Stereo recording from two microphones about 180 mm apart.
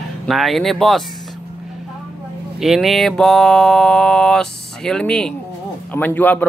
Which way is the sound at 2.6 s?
Centre (ahead or behind).